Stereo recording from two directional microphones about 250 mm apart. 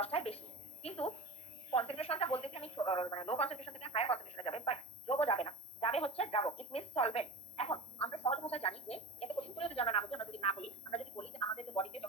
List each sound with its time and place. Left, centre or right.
0.0 s a woman's voice: left